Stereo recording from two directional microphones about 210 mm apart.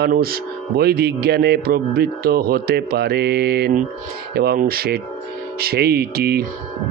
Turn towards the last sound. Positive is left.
turn(degrees=-45)  # may be behind; listen again after turning